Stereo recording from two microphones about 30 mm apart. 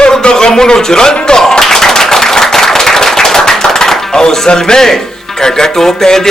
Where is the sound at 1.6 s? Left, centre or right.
Centre.